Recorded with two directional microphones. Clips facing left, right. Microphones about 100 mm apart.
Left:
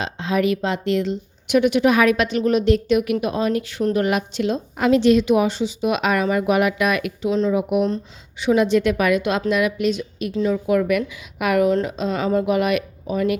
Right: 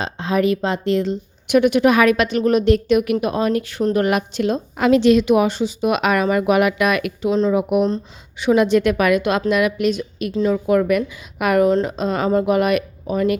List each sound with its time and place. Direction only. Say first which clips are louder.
0.0 s a woman's voice: right 2 dB; 40° right (ahead or behind)
1.5 s a woman's voice: right 2 dB; 50° right (ahead or behind)
4.8 s a woman's voice: right 2 dB; 90° right; by 7.3 s 65° right (ahead or behind)
7.3 s a woman's voice: right 2 dB; 35° right (ahead or behind)
7.5 s a woman's voice: right 2 dB; 50° right (ahead or behind)
10.3 s a woman's voice: right 2 dB; 45° right (ahead or behind)